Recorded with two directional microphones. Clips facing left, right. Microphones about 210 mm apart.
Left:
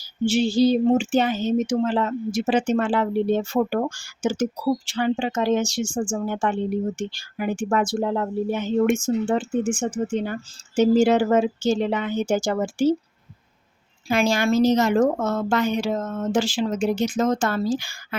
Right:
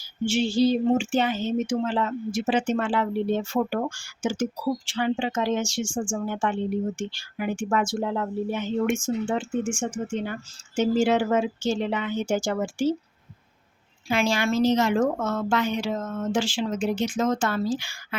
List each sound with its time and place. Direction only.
0.0 s speech: 40° left (ahead or behind)
14.1 s speech: 40° left (ahead or behind)